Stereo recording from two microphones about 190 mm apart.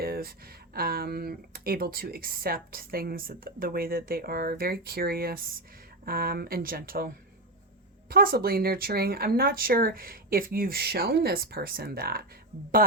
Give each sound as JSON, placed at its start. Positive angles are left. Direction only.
{"t": 0.0, "sound": "speech", "side_deg": -55}
{"t": 8.1, "sound": "speech", "side_deg": -50}